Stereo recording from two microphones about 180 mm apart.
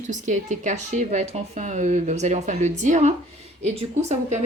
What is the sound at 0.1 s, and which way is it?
Speech, 45° right (ahead or behind).